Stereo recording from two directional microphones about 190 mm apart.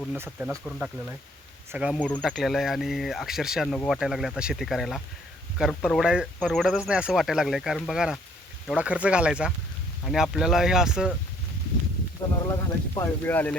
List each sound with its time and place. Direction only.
0.3 s speech: centre (ahead or behind)
2.0 s speech: 5° left (ahead or behind)
12.4 s speech: 20° left (ahead or behind)